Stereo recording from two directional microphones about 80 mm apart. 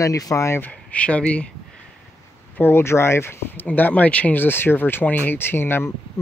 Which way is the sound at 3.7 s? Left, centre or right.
Left.